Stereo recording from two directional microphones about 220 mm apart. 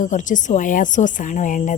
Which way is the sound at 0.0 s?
35° left (ahead or behind).